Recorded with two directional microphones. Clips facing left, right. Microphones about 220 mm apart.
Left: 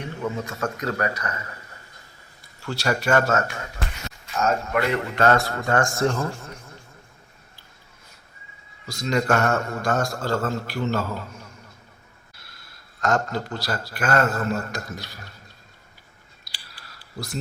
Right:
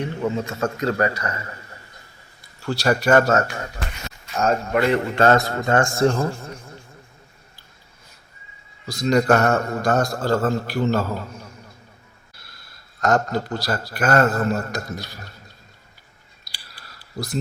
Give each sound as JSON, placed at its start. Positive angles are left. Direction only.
{"t": 0.2, "sound": "a man's voice", "side_deg": -30}
{"t": 2.6, "sound": "a man's voice", "side_deg": -35}
{"t": 8.9, "sound": "a man's voice", "side_deg": -35}
{"t": 13.0, "sound": "a man's voice", "side_deg": -40}